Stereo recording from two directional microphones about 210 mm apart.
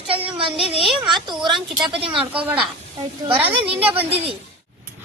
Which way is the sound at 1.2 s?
20° right (ahead or behind).